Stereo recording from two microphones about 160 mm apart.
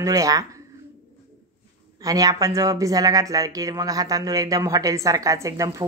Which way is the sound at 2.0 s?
20° right (ahead or behind).